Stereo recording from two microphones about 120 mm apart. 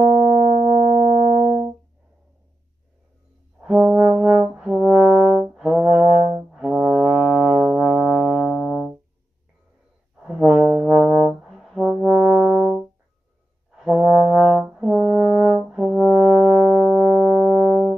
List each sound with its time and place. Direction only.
0.0 s music: 50° right (ahead or behind)
3.6 s brass instrument: 10° right (ahead or behind)
10.2 s brass instrument: 5° right (ahead or behind)
14.2 s brass instrument: 10° left (ahead or behind)